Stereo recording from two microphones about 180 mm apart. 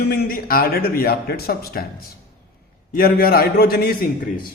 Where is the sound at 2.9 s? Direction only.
55° left (ahead or behind).